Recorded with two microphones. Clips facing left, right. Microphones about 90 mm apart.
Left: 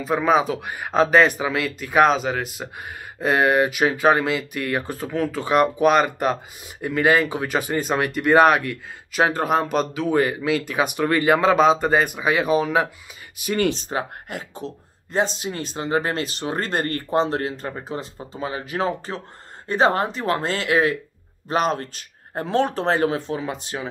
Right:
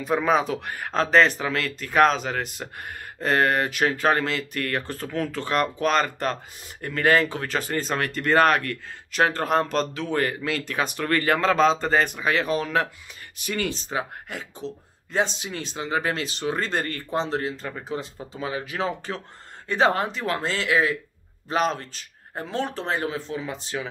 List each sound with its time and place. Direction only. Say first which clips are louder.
0.0 s speech: left 3 dB; centre (ahead or behind)
13.9 s speech: left 2 dB; 50° left (ahead or behind)
17.9 s speech: left 1 dB; 35° left (ahead or behind); by 23.5 s 60° left (ahead or behind)
23.7 s speech: right 1 dB; 25° left (ahead or behind)